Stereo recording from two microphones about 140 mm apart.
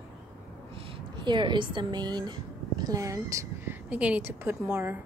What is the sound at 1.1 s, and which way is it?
A woman's voice, 35° right (ahead or behind).